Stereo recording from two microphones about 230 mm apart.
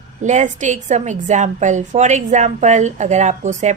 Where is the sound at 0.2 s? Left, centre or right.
Right.